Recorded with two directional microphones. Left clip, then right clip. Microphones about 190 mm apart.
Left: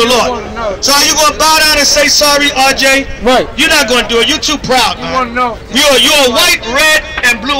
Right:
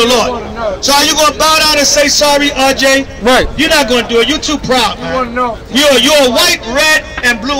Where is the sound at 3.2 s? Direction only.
20° right (ahead or behind).